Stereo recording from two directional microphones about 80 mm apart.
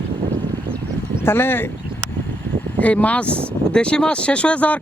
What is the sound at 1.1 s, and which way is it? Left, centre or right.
Speech, left.